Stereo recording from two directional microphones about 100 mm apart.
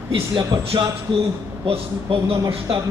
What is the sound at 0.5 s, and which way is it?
Speech, 50° right (ahead or behind).